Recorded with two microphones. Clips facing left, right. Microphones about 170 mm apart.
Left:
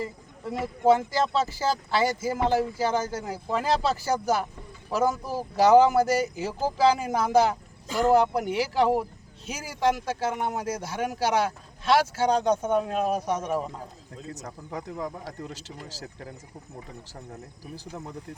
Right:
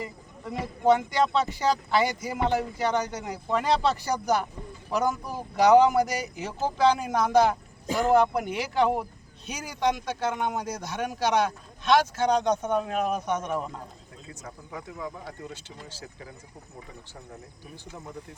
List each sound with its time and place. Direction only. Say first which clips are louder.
0.4 s speech: left 1 dB; 5° left (ahead or behind)
13.1 s speech: left 2 dB; 30° left (ahead or behind)
13.3 s speech: left 1 dB; 10° left (ahead or behind)
14.3 s speech: left 2 dB; 40° left (ahead or behind)